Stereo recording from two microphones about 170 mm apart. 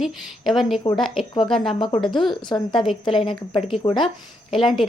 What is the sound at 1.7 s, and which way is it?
Speech, 30° left (ahead or behind).